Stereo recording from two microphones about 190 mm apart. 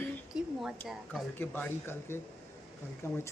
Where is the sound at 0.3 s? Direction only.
5° right (ahead or behind).